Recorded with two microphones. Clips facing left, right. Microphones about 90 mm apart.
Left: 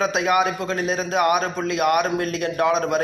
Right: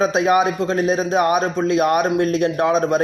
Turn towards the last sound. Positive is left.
turn(degrees=-35)  # may be behind; listen again after turning